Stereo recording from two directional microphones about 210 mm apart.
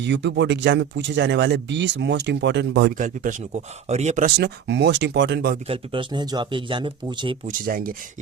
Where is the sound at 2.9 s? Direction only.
35° right (ahead or behind).